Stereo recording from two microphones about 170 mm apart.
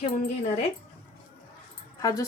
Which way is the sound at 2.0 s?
20° left (ahead or behind).